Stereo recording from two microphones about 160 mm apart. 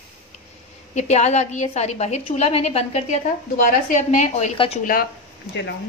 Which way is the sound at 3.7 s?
50° left (ahead or behind).